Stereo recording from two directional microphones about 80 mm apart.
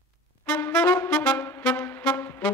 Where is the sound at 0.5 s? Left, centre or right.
Left.